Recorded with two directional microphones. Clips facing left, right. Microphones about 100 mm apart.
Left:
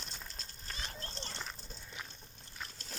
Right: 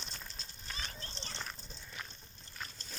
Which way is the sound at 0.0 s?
5° left (ahead or behind).